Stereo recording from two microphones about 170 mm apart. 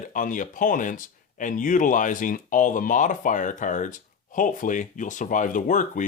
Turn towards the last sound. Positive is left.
turn(degrees=50)  # may be behind; listen again after turning